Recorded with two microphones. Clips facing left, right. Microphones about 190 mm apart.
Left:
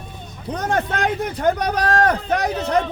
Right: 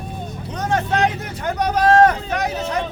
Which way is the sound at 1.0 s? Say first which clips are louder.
Left 3 dB; 55° left (ahead or behind).